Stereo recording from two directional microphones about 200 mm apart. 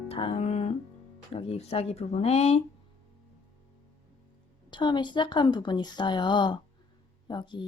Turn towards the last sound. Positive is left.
turn(degrees=20)  # may be behind; listen again after turning